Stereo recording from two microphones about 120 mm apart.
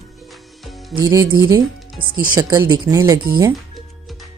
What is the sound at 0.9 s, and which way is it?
Speech, 30° right (ahead or behind).